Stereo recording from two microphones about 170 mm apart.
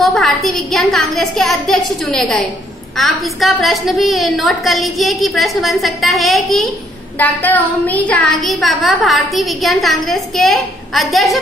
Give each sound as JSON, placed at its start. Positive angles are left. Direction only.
{"t": 0.0, "sound": "a woman's voice", "side_deg": 0}